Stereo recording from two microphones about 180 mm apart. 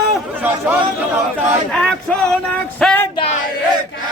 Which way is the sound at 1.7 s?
5° left (ahead or behind).